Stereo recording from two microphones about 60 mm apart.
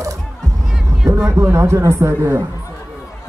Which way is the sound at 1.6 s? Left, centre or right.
Right.